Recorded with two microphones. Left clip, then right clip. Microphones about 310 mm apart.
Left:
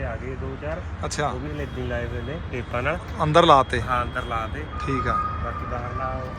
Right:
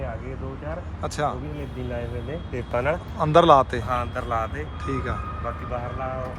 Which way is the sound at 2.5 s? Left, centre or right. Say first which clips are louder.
Right 2 dB; right.